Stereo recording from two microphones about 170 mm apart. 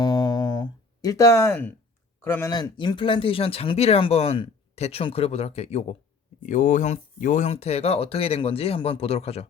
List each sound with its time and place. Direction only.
0.0 s music: 25° left (ahead or behind)
2.2 s speech: 15° left (ahead or behind)
2.5 s speech: 25° left (ahead or behind)